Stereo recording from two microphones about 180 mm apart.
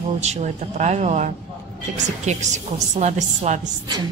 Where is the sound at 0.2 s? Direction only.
40° right (ahead or behind).